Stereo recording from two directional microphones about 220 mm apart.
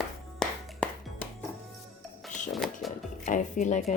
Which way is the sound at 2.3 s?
35° left (ahead or behind).